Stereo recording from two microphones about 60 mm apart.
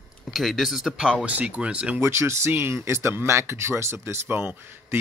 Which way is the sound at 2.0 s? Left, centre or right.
Right.